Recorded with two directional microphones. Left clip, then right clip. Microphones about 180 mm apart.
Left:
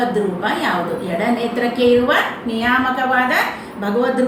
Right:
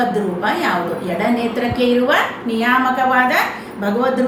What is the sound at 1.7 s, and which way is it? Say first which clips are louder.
A woman's voice: left 1 dB; 15° right (ahead or behind).